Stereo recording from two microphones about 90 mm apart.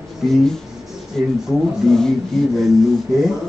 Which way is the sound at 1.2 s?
Centre (ahead or behind).